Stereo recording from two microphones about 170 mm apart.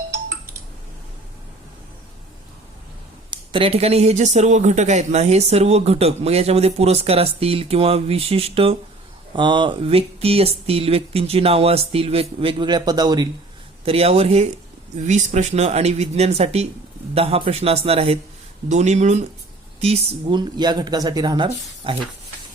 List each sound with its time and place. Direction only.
3.2 s speech: 30° right (ahead or behind)
13.8 s speech: 35° right (ahead or behind)